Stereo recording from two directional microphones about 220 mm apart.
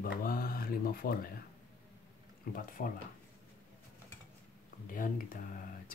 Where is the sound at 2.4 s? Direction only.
40° left (ahead or behind).